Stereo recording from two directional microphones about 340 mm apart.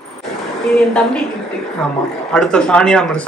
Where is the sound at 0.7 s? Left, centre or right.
Centre.